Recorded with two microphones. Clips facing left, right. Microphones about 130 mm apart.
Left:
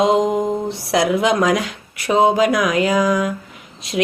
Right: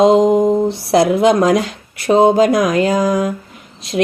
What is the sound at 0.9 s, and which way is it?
Speech, 35° right (ahead or behind).